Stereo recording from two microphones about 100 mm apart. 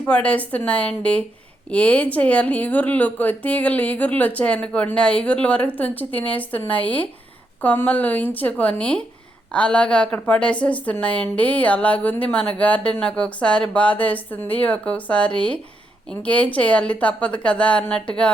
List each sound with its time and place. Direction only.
0.0 s a woman's voice: 10° left (ahead or behind)